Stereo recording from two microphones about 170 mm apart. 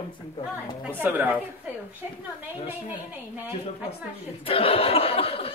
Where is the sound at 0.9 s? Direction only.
10° right (ahead or behind).